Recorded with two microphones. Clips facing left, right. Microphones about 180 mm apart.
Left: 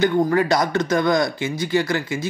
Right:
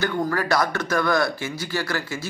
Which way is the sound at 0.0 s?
20° left (ahead or behind).